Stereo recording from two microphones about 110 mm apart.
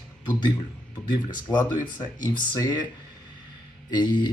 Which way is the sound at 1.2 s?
40° left (ahead or behind).